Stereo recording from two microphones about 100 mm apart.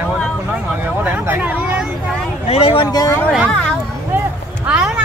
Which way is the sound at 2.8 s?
40° left (ahead or behind).